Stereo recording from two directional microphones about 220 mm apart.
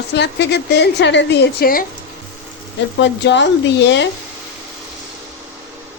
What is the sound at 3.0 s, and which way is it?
A woman's voice, 55° left (ahead or behind).